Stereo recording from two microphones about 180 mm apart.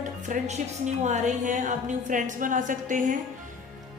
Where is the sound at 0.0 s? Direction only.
40° right (ahead or behind).